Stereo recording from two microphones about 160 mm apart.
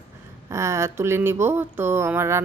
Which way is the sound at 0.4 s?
15° right (ahead or behind).